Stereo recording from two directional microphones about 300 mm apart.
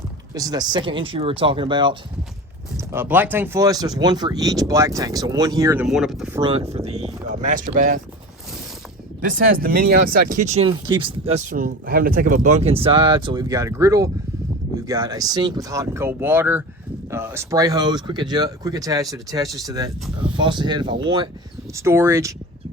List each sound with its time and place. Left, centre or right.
0.3 s speech: centre
6.4 s speech: centre
9.2 s speech: right; by 22.4 s centre